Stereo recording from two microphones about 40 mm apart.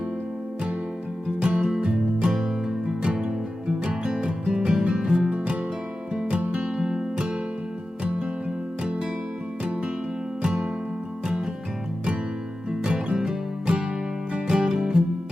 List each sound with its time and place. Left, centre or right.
1.4 s music: right
6.4 s music: right
6.7 s music: right
8.8 s music: centre
10.4 s music: right
12.8 s music: right